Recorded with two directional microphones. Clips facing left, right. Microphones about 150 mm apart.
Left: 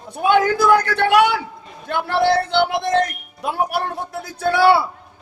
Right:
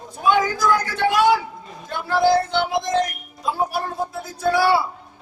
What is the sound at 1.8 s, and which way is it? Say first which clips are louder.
Music: left 1 dB; 65° left (ahead or behind).